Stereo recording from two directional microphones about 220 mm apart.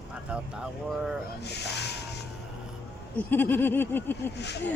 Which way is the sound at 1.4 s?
50° left (ahead or behind).